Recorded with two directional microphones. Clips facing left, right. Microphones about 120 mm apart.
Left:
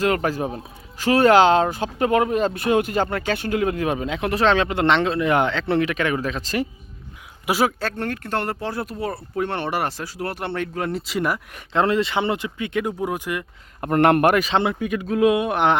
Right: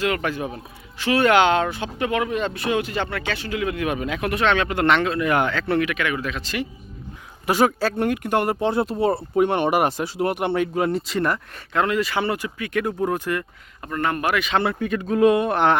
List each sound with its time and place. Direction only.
0.0 s speech: 35° left (ahead or behind)
7.4 s speech: 5° left (ahead or behind); by 8.7 s 15° right (ahead or behind)
8.7 s speech: 25° right (ahead or behind); by 11.3 s 5° left (ahead or behind)
11.7 s speech: 30° left (ahead or behind)
13.8 s speech: 70° left (ahead or behind); by 14.4 s 55° left (ahead or behind)
14.6 s speech: 15° left (ahead or behind)